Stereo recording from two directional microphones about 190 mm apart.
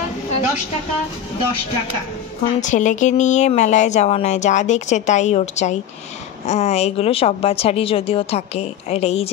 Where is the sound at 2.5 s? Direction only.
40° left (ahead or behind).